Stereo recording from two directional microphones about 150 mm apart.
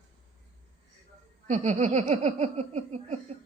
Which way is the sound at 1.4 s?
50° right (ahead or behind).